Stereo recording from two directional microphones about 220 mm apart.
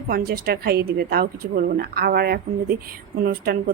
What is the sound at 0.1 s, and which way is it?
Speech, 45° right (ahead or behind).